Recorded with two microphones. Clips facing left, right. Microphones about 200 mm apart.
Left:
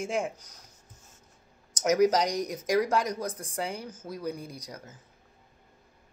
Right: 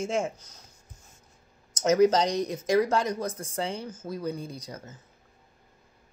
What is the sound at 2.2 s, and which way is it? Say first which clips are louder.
Speech: right 2 dB; 25° right (ahead or behind).